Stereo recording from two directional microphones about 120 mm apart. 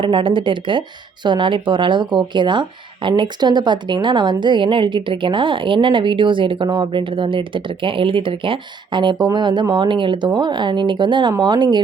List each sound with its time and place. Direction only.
0.0 s speech: 45° right (ahead or behind)